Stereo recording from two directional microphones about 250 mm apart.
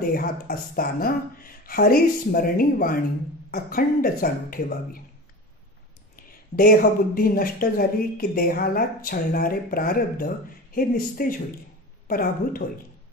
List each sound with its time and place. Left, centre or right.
0.1 s speech: left
6.1 s speech: left